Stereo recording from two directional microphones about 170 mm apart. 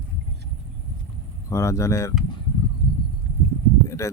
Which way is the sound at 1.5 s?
20° left (ahead or behind).